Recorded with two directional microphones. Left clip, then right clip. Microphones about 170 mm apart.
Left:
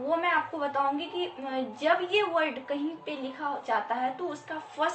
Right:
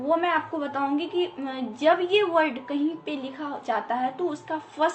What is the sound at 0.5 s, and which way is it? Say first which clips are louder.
A woman's voice: right 1 dB; 25° right (ahead or behind).